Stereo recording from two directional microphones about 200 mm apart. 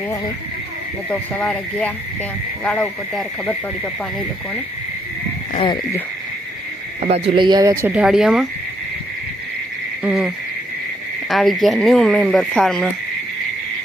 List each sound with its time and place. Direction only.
1.1 s speech: 5° left (ahead or behind)
5.5 s speech: 20° left (ahead or behind)
7.0 s speech: 30° right (ahead or behind); by 8.4 s centre (ahead or behind)
10.0 s speech: 5° right (ahead or behind)